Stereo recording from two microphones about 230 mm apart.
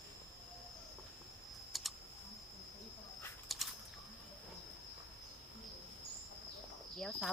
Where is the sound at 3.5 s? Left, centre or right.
Centre.